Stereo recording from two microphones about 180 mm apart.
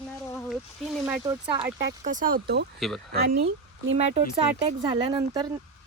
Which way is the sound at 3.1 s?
60° right (ahead or behind).